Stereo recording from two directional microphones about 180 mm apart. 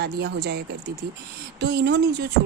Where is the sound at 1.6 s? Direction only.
65° right (ahead or behind).